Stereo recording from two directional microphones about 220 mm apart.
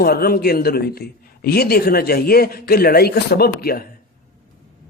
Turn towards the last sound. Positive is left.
turn(degrees=40)  # may be behind; listen again after turning